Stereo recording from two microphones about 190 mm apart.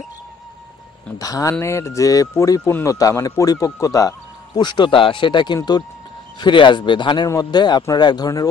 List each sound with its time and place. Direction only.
1.1 s speech: 20° left (ahead or behind)